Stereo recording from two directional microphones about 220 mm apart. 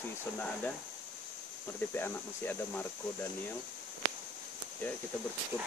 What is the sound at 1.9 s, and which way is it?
Speech, 10° left (ahead or behind).